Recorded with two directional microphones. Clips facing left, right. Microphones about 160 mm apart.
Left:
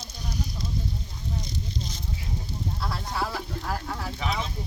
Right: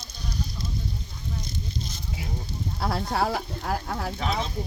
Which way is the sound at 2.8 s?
65° right (ahead or behind).